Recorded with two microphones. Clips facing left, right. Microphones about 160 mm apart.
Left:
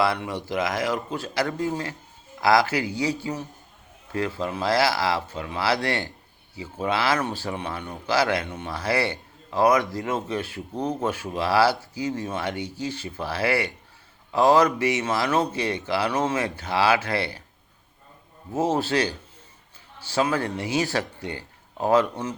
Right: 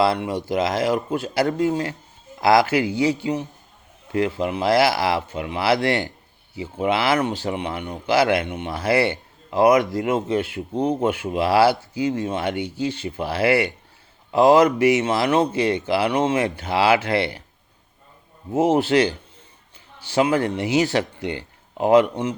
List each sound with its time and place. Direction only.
0.0 s speech: 25° right (ahead or behind)
18.5 s speech: 20° right (ahead or behind)